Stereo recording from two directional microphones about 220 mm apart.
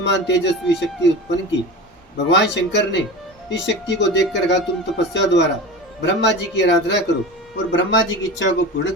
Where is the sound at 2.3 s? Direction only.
50° left (ahead or behind).